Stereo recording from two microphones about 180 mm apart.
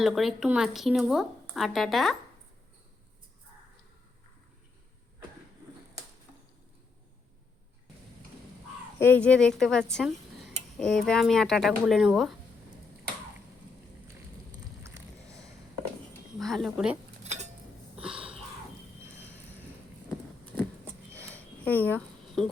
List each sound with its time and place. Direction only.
0.0 s speech: centre (ahead or behind)
9.0 s speech: 10° left (ahead or behind)
16.4 s speech: centre (ahead or behind)
17.2 s a sound: 40° right (ahead or behind)
20.1 s a sound: 5° left (ahead or behind)
21.6 s speech: 10° left (ahead or behind)